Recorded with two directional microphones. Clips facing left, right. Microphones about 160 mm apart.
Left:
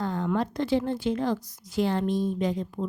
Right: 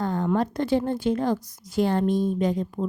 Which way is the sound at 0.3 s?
45° right (ahead or behind).